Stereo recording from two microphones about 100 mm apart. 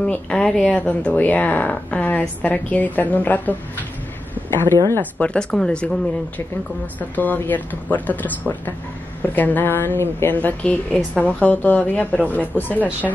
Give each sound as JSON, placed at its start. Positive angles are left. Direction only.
{"t": 0.0, "sound": "speech", "side_deg": 10}
{"t": 5.2, "sound": "speech", "side_deg": 10}